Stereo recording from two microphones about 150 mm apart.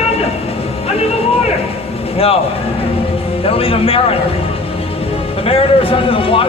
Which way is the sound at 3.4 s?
40° left (ahead or behind).